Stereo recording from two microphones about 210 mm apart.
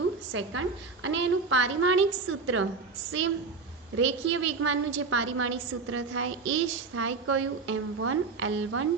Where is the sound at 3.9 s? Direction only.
65° right (ahead or behind).